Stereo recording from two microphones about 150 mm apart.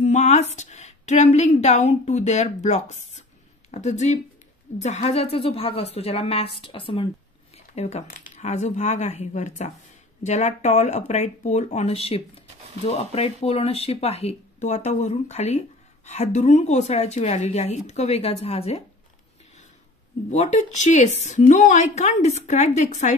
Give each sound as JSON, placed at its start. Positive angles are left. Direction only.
{"t": 0.0, "sound": "a woman's voice", "side_deg": 50}
{"t": 7.5, "sound": "a sound", "side_deg": 45}
{"t": 8.1, "sound": "a woman's voice", "side_deg": 50}
{"t": 20.2, "sound": "a woman's voice", "side_deg": 50}